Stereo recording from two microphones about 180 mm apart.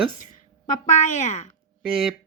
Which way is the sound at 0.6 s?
40° left (ahead or behind).